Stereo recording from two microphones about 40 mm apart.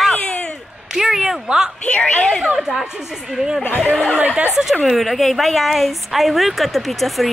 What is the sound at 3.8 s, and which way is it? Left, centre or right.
Speech, left.